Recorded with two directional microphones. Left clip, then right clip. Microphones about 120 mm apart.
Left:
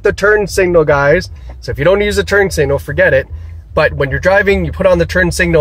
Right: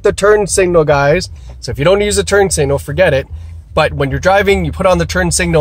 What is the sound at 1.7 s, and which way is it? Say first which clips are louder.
Speech: even; 40° right (ahead or behind).